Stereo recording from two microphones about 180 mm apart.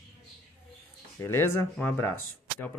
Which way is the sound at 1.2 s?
15° left (ahead or behind).